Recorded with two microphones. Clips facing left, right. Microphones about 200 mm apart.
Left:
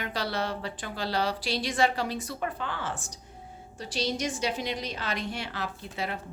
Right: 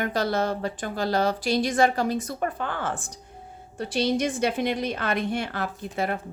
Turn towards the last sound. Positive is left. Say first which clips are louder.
# right 6 dB
turn(degrees=-50)  # may be behind; listen again after turning